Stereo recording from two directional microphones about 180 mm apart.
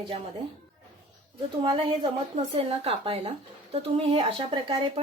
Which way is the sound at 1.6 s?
30° right (ahead or behind).